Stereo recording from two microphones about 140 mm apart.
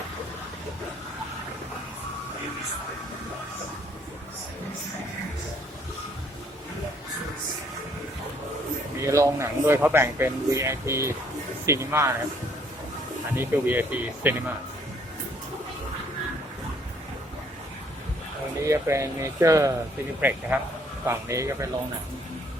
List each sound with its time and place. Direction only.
9.0 s speech: 20° right (ahead or behind)
13.3 s speech: 15° right (ahead or behind)
18.6 s speech: 20° right (ahead or behind)